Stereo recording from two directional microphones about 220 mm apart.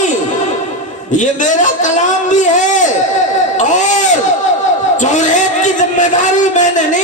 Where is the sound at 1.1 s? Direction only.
35° left (ahead or behind).